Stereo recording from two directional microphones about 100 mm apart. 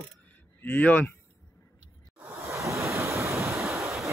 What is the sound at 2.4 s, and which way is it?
Waves, 30° right (ahead or behind).